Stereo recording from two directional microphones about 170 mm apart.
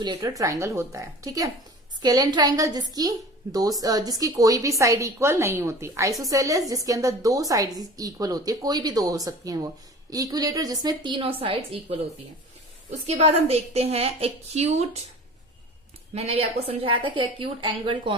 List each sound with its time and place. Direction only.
0.0 s a woman's voice: 25° right (ahead or behind); by 14.8 s 40° right (ahead or behind)
16.1 s a woman's voice: 35° right (ahead or behind)